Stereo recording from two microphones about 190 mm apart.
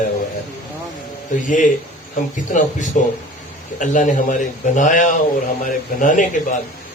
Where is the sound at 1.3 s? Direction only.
40° left (ahead or behind).